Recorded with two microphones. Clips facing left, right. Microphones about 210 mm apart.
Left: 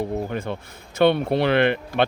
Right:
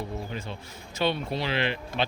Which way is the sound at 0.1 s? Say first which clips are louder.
Left 9 dB; 55° left (ahead or behind).